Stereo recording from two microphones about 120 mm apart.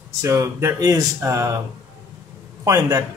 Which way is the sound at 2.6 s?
25° right (ahead or behind).